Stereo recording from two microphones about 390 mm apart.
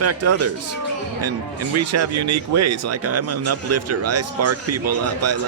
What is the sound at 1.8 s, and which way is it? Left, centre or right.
Speech, right.